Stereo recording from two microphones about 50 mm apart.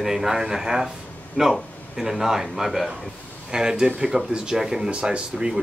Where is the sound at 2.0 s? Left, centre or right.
Centre.